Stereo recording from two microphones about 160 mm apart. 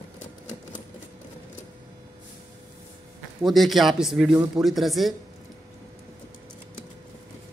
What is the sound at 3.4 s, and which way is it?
A man's voice, centre (ahead or behind).